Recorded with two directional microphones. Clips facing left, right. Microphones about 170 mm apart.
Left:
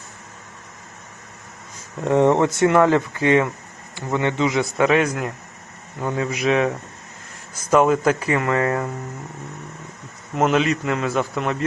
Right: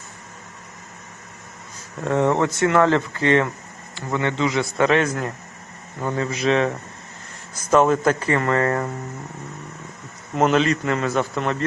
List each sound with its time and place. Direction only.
2.0 s speech: 20° left (ahead or behind)
10.3 s a man's voice: 5° left (ahead or behind)